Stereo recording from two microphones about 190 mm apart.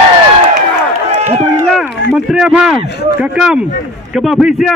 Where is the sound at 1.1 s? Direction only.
40° right (ahead or behind).